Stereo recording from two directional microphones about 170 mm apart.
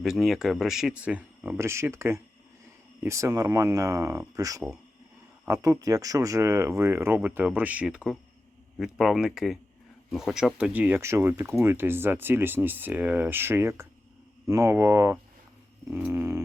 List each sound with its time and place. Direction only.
0.0 s speech: centre (ahead or behind)